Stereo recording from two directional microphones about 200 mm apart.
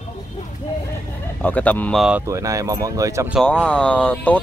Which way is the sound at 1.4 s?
5° left (ahead or behind).